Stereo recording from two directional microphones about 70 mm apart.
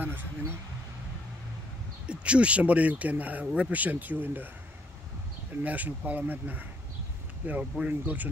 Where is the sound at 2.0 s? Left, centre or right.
Centre.